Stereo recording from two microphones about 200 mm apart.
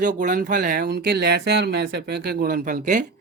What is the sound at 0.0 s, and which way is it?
Speech, 40° right (ahead or behind).